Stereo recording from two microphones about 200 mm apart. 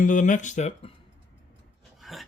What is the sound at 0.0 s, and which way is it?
Speech, 40° left (ahead or behind).